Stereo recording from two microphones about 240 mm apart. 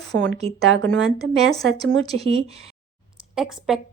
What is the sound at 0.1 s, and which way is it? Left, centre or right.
A woman's voice, right.